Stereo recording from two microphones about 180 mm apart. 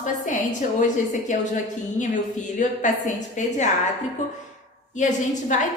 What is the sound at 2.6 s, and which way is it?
Speech, 45° left (ahead or behind).